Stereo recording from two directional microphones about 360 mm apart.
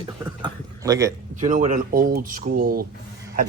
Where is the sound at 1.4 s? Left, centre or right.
Right.